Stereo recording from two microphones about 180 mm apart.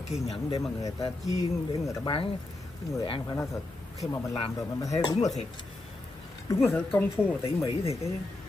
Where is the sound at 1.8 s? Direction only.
20° left (ahead or behind).